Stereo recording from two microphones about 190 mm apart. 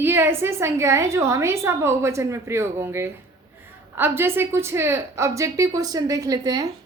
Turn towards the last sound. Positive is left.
turn(degrees=-20)  # may be behind; listen again after turning